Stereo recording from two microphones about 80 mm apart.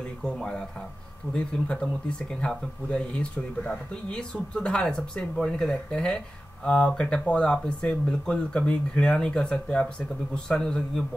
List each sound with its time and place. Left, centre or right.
0.2 s speech: centre